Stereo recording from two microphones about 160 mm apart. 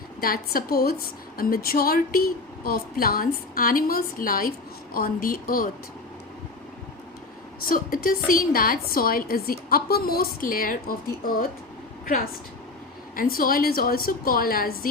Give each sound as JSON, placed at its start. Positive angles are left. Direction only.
{"t": 0.2, "sound": "a woman's voice", "side_deg": 70}
{"t": 1.4, "sound": "a woman's voice", "side_deg": 65}
{"t": 7.7, "sound": "a woman's voice", "side_deg": 65}